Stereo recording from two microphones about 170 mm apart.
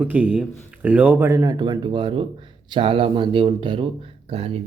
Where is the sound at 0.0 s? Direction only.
10° right (ahead or behind).